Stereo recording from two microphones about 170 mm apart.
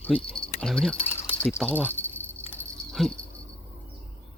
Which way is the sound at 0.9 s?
35° left (ahead or behind).